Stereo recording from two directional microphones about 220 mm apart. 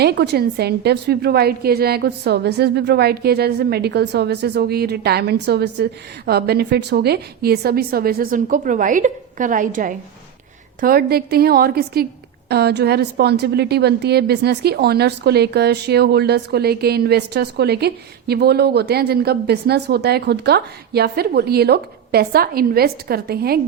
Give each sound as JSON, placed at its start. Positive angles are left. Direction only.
{"t": 0.0, "sound": "a woman's voice", "side_deg": -50}